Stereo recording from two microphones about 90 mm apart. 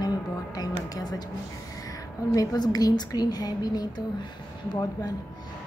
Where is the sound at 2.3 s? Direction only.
45° left (ahead or behind).